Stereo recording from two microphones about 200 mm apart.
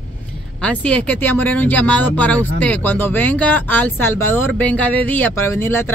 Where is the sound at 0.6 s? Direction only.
5° left (ahead or behind).